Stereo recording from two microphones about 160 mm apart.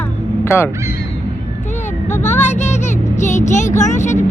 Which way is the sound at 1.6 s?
45° left (ahead or behind).